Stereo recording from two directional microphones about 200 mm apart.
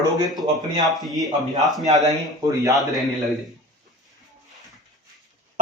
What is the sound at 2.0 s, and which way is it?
Speech, 15° right (ahead or behind).